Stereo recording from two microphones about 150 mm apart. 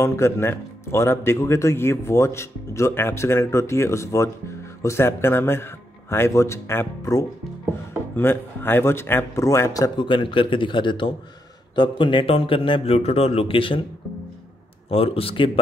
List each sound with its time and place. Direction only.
0.0 s a man's voice: 20° left (ahead or behind)
9.9 s speech: 35° left (ahead or behind)
14.9 s speech: 40° left (ahead or behind)